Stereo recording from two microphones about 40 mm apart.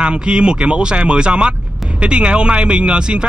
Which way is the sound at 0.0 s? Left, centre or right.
Right.